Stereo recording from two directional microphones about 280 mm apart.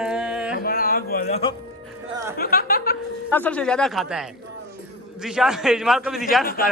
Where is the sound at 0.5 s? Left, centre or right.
Left.